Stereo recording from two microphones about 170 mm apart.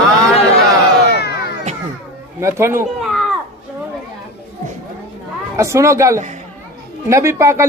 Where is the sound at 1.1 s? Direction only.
75° left (ahead or behind).